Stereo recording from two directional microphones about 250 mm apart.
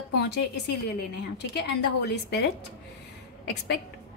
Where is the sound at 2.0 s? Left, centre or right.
Left.